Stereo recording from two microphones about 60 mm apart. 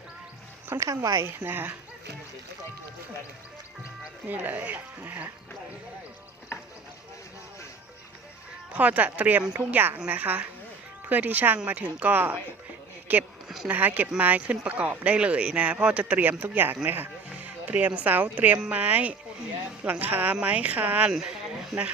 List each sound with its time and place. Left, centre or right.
0.7 s speech: right
1.5 s speech: right
4.3 s speech: right
6.5 s a sound: left
8.7 s speech: right
21.1 s speech: centre